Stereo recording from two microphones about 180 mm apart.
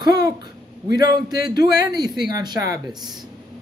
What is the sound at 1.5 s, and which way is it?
Speech, 60° left (ahead or behind).